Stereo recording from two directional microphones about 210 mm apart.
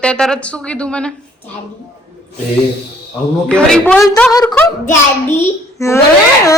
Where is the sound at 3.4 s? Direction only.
5° left (ahead or behind).